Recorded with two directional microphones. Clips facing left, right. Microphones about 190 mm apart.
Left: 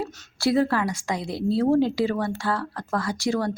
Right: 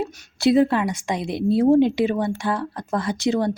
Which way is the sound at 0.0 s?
15° right (ahead or behind).